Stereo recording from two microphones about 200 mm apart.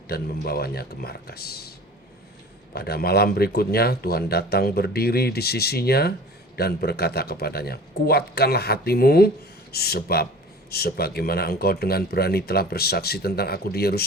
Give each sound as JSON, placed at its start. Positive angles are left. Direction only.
{"t": 0.1, "sound": "speech", "side_deg": 50}
{"t": 2.7, "sound": "speech", "side_deg": 50}